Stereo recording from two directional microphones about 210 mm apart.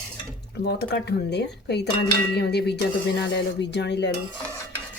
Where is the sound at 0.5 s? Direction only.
50° left (ahead or behind).